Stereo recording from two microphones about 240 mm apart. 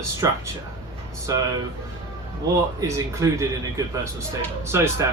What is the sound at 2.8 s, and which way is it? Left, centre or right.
Speech, centre.